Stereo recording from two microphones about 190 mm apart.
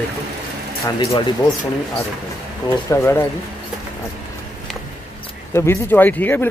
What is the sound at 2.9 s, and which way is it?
Speech, 15° left (ahead or behind).